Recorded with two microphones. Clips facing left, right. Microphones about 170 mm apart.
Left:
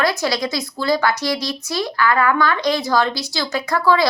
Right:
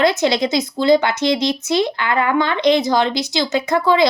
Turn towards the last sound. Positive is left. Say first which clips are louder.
# right 2 dB
turn(degrees=-20)  # may be behind; listen again after turning